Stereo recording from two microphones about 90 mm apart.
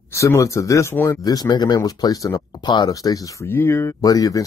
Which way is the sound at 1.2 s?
45° left (ahead or behind).